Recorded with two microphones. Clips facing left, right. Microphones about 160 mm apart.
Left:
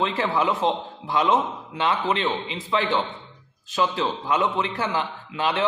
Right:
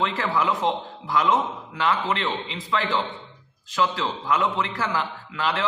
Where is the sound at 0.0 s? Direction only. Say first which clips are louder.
Left 1 dB; 25° left (ahead or behind).